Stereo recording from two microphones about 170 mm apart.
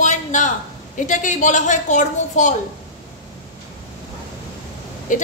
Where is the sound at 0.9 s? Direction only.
50° left (ahead or behind).